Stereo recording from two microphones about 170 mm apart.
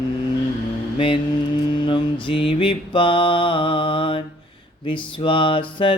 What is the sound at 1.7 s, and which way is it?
Mantra, 30° left (ahead or behind).